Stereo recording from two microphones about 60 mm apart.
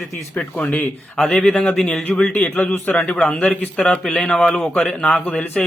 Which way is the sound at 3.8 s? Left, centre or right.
Centre.